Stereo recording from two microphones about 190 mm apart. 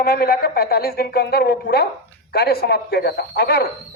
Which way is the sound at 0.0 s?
55° left (ahead or behind).